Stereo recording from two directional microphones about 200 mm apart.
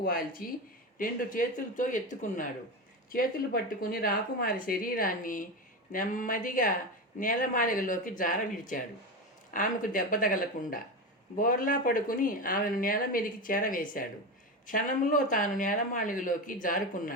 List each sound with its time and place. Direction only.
0.0 s speech: 45° left (ahead or behind)